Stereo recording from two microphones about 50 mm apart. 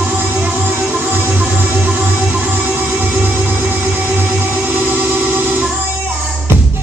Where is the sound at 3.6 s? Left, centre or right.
Right.